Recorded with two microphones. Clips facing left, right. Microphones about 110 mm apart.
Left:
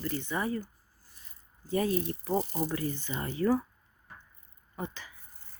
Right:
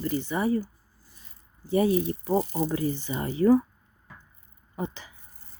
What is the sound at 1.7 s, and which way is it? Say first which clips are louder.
Speech: right 6 dB; 10° right (ahead or behind).